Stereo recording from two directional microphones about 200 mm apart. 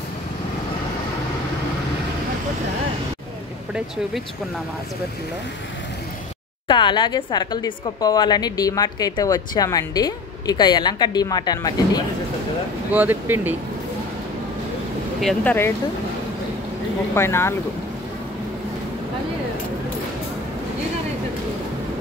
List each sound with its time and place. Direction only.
6.7 s a woman's voice: 25° left (ahead or behind)
12.9 s speech: 10° right (ahead or behind)
15.1 s speech: 5° left (ahead or behind)
17.1 s speech: 10° left (ahead or behind)